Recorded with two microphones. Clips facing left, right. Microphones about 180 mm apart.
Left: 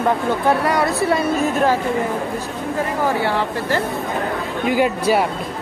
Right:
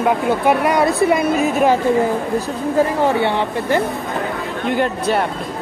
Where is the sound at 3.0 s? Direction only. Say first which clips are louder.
Right 2 dB; 25° right (ahead or behind).